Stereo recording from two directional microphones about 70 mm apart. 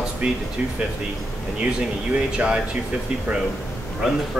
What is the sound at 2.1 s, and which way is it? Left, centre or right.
Speech, centre.